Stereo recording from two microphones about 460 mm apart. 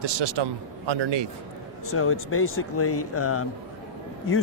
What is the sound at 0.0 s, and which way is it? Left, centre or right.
A man's voice, right.